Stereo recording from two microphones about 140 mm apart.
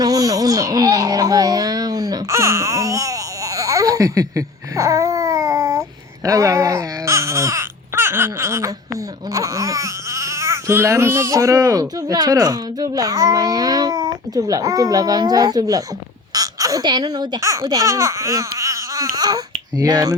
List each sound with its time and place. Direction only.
0.0 s baby cry: 25° right (ahead or behind)
9.3 s speech: 25° right (ahead or behind)
16.3 s a sound: 25° right (ahead or behind)
17.1 s speech: 30° right (ahead or behind)